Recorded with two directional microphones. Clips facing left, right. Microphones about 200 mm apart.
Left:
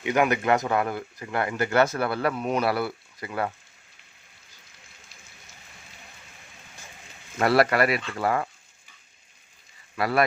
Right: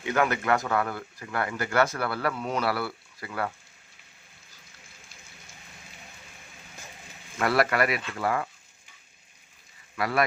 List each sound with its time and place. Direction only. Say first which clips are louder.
0.0 s speech: left 3 dB; 15° left (ahead or behind)
7.3 s speech: left 4 dB; 30° left (ahead or behind)
10.0 s speech: left 3 dB; 30° left (ahead or behind)